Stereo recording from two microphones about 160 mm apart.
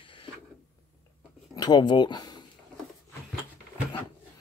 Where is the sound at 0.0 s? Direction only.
35° left (ahead or behind).